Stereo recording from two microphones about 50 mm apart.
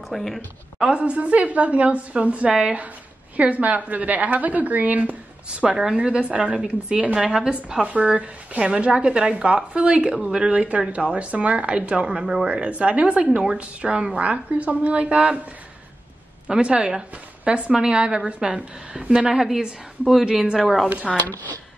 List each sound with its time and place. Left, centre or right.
0.1 s a woman's voice: centre
0.7 s a woman's voice: centre
5.5 s speech: centre
7.2 s a woman's voice: centre
10.1 s a woman's voice: centre
16.4 s a woman's voice: right; by 20.9 s centre